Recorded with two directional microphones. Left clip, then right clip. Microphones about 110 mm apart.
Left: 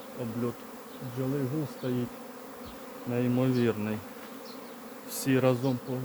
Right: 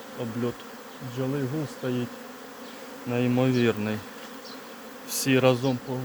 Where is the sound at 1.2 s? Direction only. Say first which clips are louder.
Right 3 dB; 15° right (ahead or behind).